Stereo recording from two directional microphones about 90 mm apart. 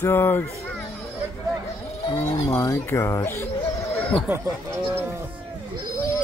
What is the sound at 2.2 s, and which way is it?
Speech, 40° left (ahead or behind).